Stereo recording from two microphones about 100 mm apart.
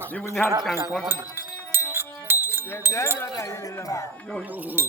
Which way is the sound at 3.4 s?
35° left (ahead or behind).